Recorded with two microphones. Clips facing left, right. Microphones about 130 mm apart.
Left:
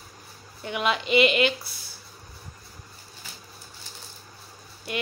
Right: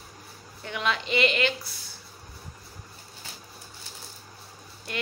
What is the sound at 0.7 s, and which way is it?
Speech, 15° left (ahead or behind).